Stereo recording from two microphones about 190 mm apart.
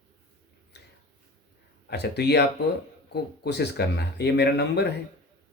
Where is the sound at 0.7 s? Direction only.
60° left (ahead or behind).